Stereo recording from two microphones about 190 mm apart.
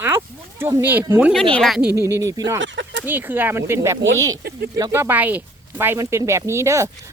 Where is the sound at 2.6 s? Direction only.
70° right (ahead or behind).